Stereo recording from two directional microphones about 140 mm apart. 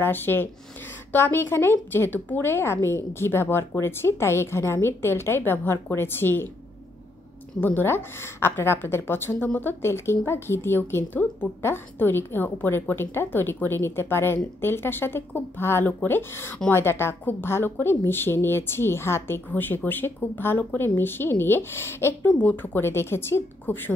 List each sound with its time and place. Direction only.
0.0 s a woman's voice: 15° left (ahead or behind)
7.6 s a woman's voice: 15° left (ahead or behind)